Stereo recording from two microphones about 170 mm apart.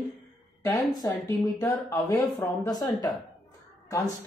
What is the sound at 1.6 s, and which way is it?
Speech, 15° left (ahead or behind).